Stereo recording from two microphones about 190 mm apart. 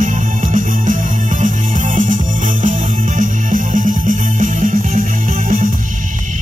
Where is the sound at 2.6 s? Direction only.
45° right (ahead or behind).